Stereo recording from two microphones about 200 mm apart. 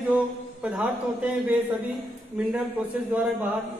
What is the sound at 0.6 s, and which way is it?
Speech, 5° right (ahead or behind).